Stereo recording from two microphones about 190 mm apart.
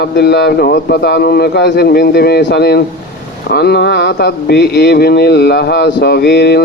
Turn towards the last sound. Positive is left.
turn(degrees=60)  # may be behind; listen again after turning